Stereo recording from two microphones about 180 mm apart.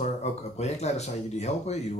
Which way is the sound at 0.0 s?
40° left (ahead or behind).